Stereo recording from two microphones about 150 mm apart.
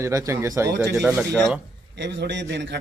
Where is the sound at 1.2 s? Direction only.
5° left (ahead or behind).